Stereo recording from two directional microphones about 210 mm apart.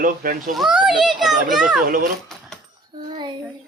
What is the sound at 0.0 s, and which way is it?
Speech, 40° right (ahead or behind).